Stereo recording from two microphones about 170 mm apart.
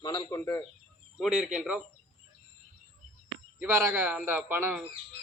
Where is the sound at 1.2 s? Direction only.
5° right (ahead or behind).